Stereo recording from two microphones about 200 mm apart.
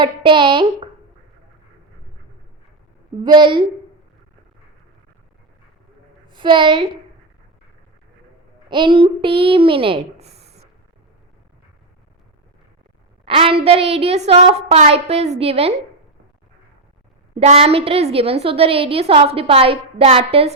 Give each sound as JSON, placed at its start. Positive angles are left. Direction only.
{"t": 0.0, "sound": "a woman's voice", "side_deg": -25}
{"t": 3.2, "sound": "a woman's voice", "side_deg": -25}
{"t": 6.3, "sound": "a woman's voice", "side_deg": -25}
{"t": 8.7, "sound": "a child's voice", "side_deg": -25}
{"t": 13.2, "sound": "a woman's voice", "side_deg": -25}
{"t": 17.3, "sound": "a woman's voice", "side_deg": -30}